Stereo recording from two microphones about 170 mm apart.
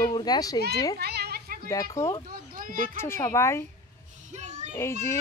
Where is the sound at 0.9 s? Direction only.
70° right (ahead or behind).